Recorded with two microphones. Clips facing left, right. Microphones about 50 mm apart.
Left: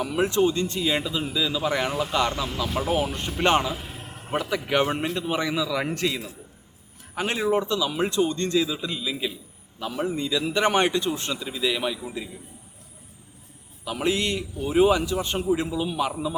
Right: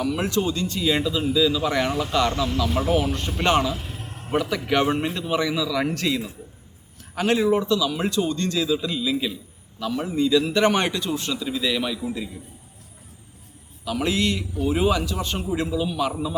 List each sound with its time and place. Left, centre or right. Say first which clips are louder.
0.0 s a man's voice: left 1 dB; centre
0.8 s a man's voice: right 3 dB; centre
6.0 s a man's voice: right 1 dB; centre
7.2 s a man's voice: right 3 dB; left
9.7 s a man's voice: right 3 dB; left
11.5 s speech: even; centre
13.8 s a man's voice: right 2 dB; centre